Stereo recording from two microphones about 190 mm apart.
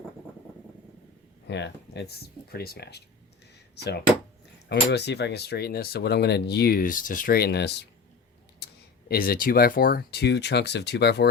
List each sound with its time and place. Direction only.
1.5 s speech: 65° left (ahead or behind)
4.7 s speech: 65° left (ahead or behind)